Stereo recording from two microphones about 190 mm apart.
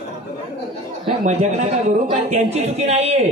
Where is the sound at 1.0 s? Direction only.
35° right (ahead or behind).